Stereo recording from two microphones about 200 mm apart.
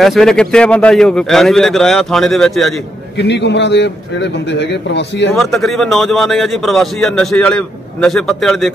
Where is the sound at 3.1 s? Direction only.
60° left (ahead or behind).